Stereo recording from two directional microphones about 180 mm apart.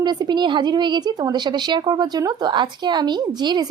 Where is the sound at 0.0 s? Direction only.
25° right (ahead or behind).